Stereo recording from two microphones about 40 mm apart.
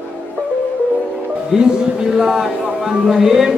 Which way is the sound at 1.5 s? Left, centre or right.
Centre.